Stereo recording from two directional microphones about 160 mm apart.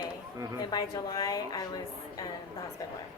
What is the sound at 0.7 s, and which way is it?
A woman's voice, 25° left (ahead or behind).